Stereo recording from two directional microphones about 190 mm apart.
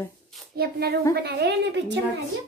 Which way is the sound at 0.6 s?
55° right (ahead or behind).